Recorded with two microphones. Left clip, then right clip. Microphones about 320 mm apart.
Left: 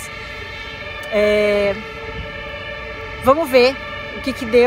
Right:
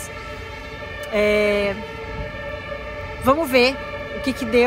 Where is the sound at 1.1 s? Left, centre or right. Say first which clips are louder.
Left 3 dB; centre.